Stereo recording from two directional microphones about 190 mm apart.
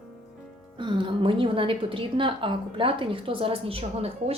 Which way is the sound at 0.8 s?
25° right (ahead or behind).